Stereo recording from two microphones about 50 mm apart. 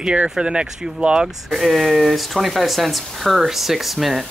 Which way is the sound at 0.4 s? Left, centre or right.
Centre.